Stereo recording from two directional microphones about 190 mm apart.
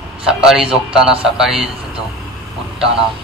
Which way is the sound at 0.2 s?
5° right (ahead or behind).